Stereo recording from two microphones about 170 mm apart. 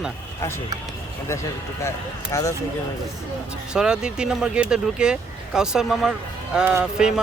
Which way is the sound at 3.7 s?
5° right (ahead or behind).